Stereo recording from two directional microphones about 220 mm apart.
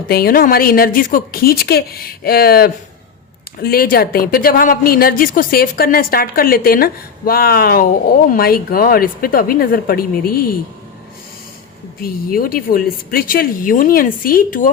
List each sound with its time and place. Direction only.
0.1 s a woman's voice: 45° left (ahead or behind)
12.0 s speech: 40° left (ahead or behind)